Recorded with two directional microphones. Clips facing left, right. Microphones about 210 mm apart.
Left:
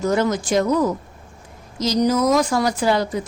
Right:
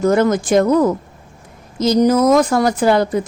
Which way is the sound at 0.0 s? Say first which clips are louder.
Right 5 dB; 55° right (ahead or behind).